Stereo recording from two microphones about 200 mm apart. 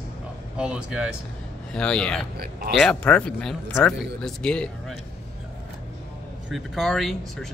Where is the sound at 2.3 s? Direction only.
50° right (ahead or behind).